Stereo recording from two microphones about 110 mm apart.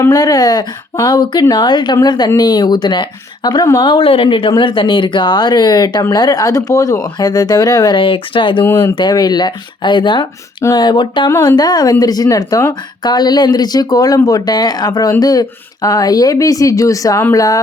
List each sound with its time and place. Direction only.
0.0 s speech: 35° left (ahead or behind)
3.9 s speech: 55° left (ahead or behind)
8.6 s speech: 15° left (ahead or behind)
9.0 s speech: 40° left (ahead or behind)
10.6 s speech: 35° left (ahead or behind)